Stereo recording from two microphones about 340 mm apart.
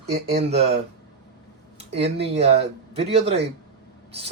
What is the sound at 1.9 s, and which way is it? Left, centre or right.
Speech, centre.